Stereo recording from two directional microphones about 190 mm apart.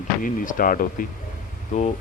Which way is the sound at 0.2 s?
45° left (ahead or behind).